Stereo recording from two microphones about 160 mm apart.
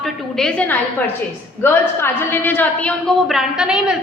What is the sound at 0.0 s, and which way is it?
A woman's voice, 5° left (ahead or behind).